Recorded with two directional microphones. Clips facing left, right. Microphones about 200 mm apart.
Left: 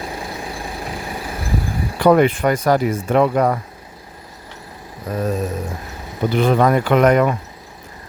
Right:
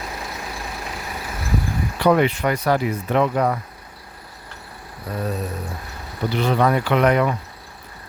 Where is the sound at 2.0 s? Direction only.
50° left (ahead or behind).